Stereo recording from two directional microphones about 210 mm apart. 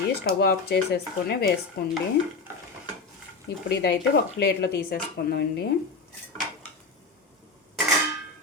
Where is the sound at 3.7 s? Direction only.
50° left (ahead or behind).